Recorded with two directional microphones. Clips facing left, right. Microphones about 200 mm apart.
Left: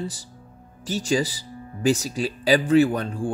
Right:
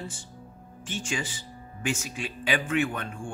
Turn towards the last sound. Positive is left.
turn(degrees=35)  # may be behind; listen again after turning